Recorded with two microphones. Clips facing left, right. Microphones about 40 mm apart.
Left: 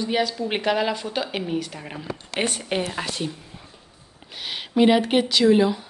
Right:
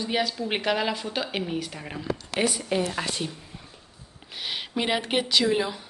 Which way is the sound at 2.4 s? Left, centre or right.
Left.